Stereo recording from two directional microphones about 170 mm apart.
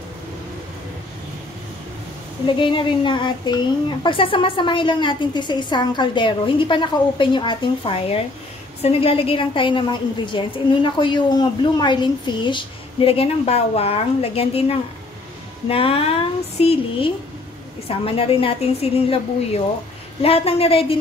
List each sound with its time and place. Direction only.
2.4 s a woman's voice: 30° left (ahead or behind)